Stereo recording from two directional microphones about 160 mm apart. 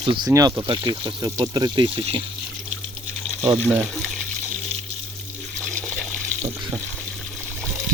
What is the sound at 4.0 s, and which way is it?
Speech, 5° left (ahead or behind).